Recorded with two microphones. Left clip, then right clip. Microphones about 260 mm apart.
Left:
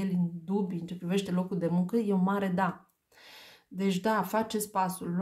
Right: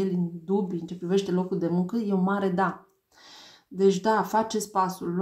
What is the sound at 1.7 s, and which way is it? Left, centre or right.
Speech, left.